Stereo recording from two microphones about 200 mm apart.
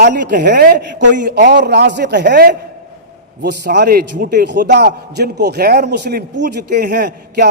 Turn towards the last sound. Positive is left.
turn(degrees=-50)  # may be behind; listen again after turning